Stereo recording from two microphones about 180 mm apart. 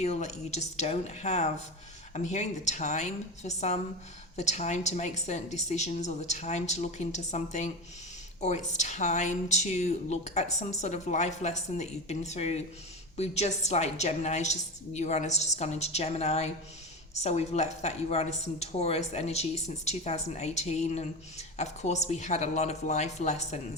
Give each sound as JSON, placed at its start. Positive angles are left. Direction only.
{"t": 0.0, "sound": "speech", "side_deg": 40}